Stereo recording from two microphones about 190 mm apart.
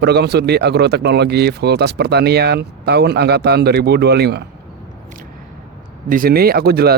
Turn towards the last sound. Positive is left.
turn(degrees=-55)  # may be behind; listen again after turning